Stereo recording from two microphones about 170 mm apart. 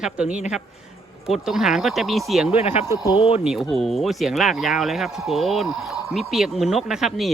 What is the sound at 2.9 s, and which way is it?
Speech, 25° left (ahead or behind).